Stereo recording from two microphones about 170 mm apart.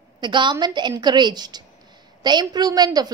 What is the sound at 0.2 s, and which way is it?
A woman's voice, 25° right (ahead or behind).